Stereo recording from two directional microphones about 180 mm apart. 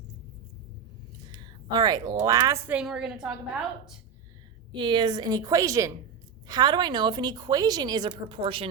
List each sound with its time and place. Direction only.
1.3 s a woman's voice: 20° right (ahead or behind); by 3.3 s 5° right (ahead or behind)
4.7 s a woman's voice: 25° right (ahead or behind)